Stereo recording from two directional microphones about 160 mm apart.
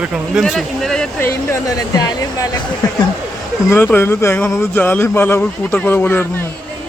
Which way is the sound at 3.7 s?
15° left (ahead or behind).